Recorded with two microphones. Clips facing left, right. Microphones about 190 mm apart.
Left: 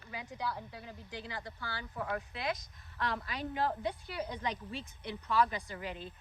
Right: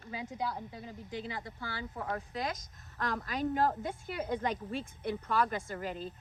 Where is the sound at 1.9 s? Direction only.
35° right (ahead or behind).